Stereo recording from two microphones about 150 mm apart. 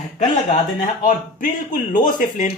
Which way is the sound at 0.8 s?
65° left (ahead or behind).